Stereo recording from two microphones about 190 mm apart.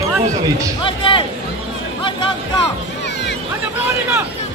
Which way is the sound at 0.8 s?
25° left (ahead or behind).